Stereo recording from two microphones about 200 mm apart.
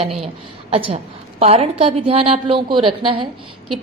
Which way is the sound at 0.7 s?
30° right (ahead or behind).